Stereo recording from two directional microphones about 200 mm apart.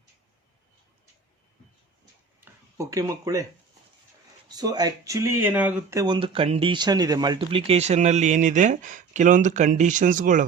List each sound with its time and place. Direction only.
2.4 s speech: 15° right (ahead or behind)
4.4 s speech: 20° right (ahead or behind); by 10.4 s 40° right (ahead or behind)